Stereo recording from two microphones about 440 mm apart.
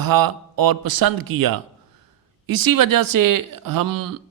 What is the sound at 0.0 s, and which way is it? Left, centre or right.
A man's voice, right.